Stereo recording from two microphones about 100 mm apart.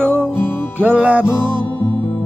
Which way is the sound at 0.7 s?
15° right (ahead or behind).